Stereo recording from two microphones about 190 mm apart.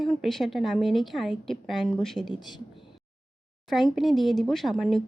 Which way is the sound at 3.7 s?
Centre (ahead or behind).